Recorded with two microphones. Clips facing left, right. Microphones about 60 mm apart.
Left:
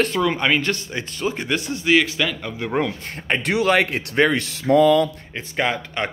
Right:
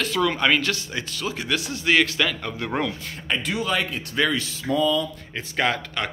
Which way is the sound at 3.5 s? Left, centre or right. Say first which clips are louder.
Left 10 dB; left.